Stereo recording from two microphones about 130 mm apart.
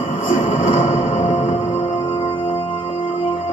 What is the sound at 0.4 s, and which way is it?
Music, 90° left.